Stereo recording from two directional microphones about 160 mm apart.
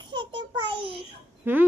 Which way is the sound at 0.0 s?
30° right (ahead or behind).